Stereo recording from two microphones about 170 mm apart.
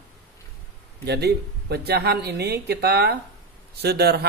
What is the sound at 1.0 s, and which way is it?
A woman's voice, 70° right (ahead or behind).